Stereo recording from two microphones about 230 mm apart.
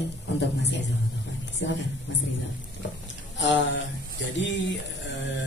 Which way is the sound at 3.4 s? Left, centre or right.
Left.